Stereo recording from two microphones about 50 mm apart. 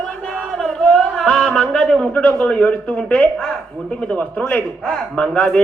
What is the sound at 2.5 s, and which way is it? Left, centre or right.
Speech, left.